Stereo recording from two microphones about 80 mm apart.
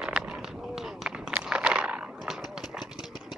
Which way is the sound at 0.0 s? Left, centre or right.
Centre.